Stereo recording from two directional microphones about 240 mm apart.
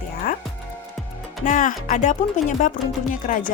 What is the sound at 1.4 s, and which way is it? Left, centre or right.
Speech, left.